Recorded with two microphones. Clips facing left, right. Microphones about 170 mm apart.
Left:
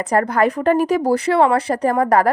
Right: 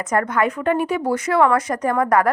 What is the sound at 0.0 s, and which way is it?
A woman's voice, 35° left (ahead or behind).